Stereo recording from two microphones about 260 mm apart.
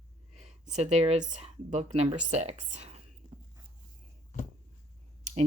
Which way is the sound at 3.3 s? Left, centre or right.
Centre.